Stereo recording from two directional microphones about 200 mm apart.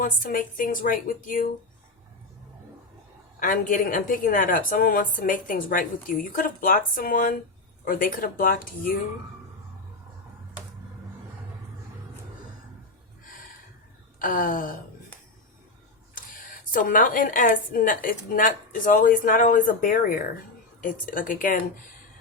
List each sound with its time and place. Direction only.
0.0 s a woman's voice: 45° left (ahead or behind)
3.4 s a woman's voice: 40° left (ahead or behind)
14.2 s a woman's voice: 45° left (ahead or behind)
16.7 s a woman's voice: 40° left (ahead or behind)